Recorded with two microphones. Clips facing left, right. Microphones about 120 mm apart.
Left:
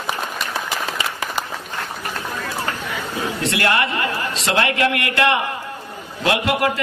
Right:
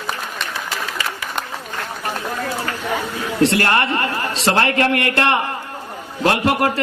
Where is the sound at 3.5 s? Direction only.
40° right (ahead or behind).